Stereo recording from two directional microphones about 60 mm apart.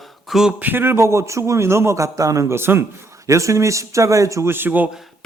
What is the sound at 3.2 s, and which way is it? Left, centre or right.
Speech, right.